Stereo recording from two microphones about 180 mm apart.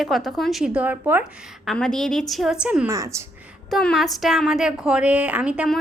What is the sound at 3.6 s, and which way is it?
A woman's voice, centre (ahead or behind).